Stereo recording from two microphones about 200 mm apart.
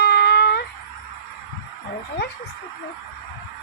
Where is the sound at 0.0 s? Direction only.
55° left (ahead or behind).